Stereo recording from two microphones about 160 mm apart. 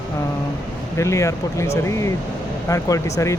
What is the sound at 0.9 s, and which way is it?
Speech, 20° left (ahead or behind).